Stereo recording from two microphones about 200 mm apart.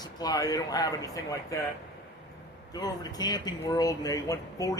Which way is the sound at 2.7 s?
20° left (ahead or behind).